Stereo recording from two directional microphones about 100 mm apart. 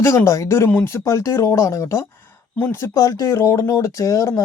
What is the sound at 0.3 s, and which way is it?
Speech, 30° left (ahead or behind).